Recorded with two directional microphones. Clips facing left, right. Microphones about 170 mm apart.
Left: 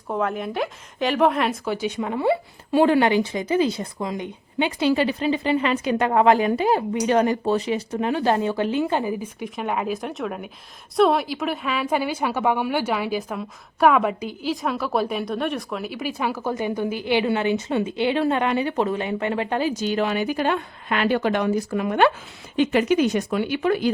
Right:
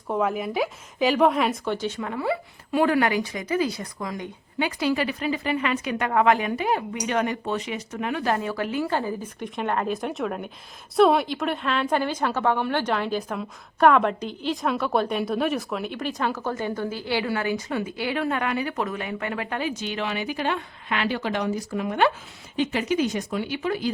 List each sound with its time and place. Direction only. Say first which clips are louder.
0.1 s a woman's voice: even; 5° right (ahead or behind); by 9.3 s 15° left (ahead or behind)
9.4 s a woman's voice: right 2 dB; 5° left (ahead or behind); by 23.9 s 60° left (ahead or behind)